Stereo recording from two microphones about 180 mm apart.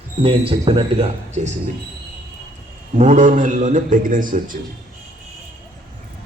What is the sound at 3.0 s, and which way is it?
A man's voice, 45° right (ahead or behind).